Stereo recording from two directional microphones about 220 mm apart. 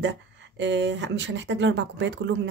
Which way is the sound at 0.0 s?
55° right (ahead or behind).